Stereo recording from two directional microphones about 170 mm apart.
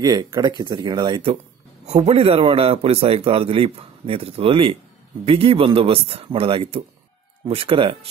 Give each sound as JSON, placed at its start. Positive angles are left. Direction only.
{"t": 0.0, "sound": "speech", "side_deg": -25}
{"t": 1.9, "sound": "a man's voice", "side_deg": -40}